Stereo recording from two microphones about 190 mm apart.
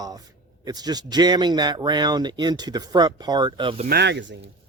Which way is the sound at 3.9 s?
65° right (ahead or behind).